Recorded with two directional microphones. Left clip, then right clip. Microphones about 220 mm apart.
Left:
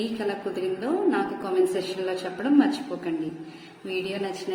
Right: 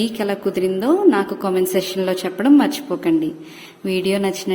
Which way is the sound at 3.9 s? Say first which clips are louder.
Right 10 dB; 45° right (ahead or behind).